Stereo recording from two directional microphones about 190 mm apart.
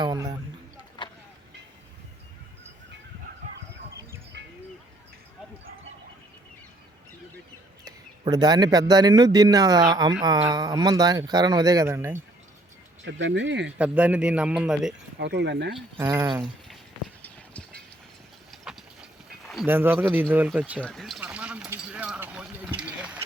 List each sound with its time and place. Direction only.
0.0 s a man's voice: 20° right (ahead or behind)
4.3 s bird: 65° right (ahead or behind)
7.9 s a man's voice: 20° right (ahead or behind)
13.1 s speech: 75° right (ahead or behind)
13.7 s speech: 5° right (ahead or behind)
15.2 s speech: 65° right (ahead or behind)
16.0 s a man's voice: 20° right (ahead or behind)
17.2 s clip-clop: 5° left (ahead or behind)
19.6 s speech: 10° right (ahead or behind)
20.8 s a sound: centre (ahead or behind)